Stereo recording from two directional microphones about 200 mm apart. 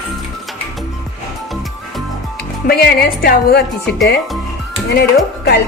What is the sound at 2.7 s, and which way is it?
Speech, 50° left (ahead or behind).